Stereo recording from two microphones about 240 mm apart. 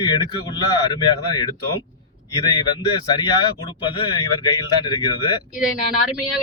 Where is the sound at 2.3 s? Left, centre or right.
Centre.